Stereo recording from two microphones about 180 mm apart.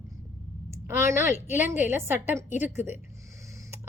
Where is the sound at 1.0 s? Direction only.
15° right (ahead or behind).